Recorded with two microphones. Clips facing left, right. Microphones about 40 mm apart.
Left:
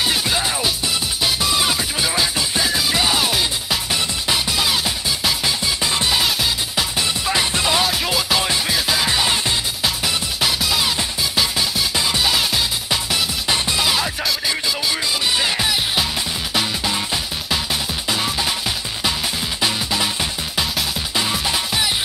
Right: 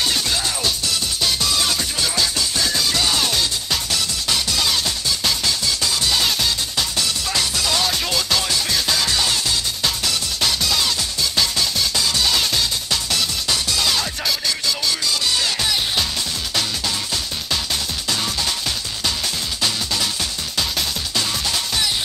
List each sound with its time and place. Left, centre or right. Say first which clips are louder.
0.0 s music: left 2 dB; centre
19.6 s music: left 2 dB; centre
21.1 s music: left 4 dB; centre